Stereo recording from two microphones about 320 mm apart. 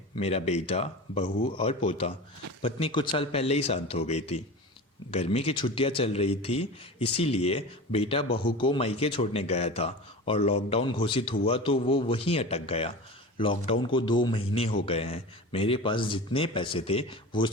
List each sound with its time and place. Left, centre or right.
0.2 s a man's voice: centre